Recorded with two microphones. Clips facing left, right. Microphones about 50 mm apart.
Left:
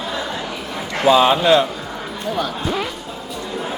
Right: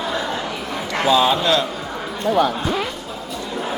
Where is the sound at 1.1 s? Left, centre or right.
Left.